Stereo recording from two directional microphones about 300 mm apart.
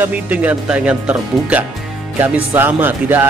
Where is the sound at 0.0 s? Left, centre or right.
Centre.